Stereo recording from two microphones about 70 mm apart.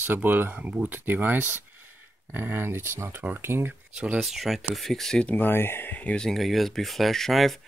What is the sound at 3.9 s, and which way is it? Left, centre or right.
Speech, centre.